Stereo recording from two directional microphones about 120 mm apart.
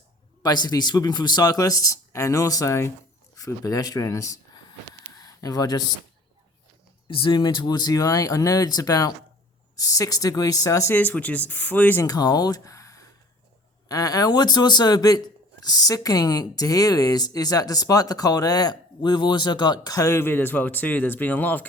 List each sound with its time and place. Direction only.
0.4 s speech: 35° left (ahead or behind)
7.1 s a woman's voice: 45° left (ahead or behind); by 10.9 s 25° left (ahead or behind)
10.9 s speech: 15° left (ahead or behind)
12.0 s speech: 35° left (ahead or behind); by 21.7 s 15° left (ahead or behind)